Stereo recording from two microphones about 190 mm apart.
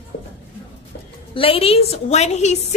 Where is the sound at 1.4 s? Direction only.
30° left (ahead or behind).